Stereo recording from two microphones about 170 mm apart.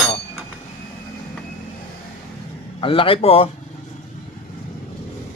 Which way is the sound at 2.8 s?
30° left (ahead or behind).